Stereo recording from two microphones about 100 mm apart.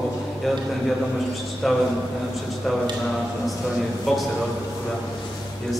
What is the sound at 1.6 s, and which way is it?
Speech, centre (ahead or behind).